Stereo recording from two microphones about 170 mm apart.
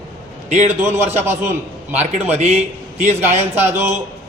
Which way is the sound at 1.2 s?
15° right (ahead or behind).